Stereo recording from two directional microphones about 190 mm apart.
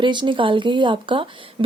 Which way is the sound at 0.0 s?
25° right (ahead or behind).